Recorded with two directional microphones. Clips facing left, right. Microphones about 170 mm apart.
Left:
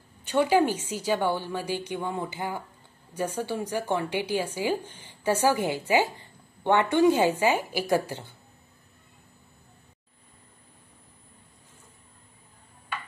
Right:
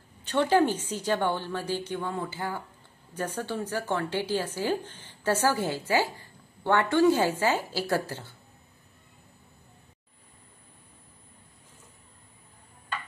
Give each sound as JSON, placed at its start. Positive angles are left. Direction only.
{"t": 0.3, "sound": "speech", "side_deg": 10}